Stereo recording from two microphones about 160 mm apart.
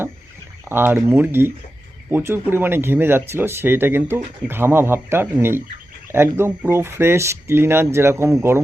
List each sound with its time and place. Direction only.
0.6 s speech: 15° right (ahead or behind)